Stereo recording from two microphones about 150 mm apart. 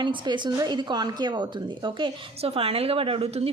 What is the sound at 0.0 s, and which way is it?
A woman's voice, 30° right (ahead or behind).